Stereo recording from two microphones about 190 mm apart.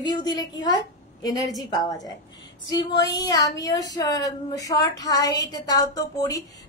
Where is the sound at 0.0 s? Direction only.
25° left (ahead or behind).